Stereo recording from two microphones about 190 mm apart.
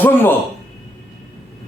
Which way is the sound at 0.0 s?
10° left (ahead or behind).